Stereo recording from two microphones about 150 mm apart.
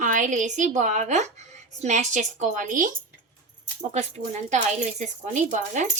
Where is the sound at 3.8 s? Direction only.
50° right (ahead or behind).